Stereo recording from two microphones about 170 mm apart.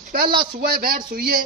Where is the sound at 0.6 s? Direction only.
55° right (ahead or behind).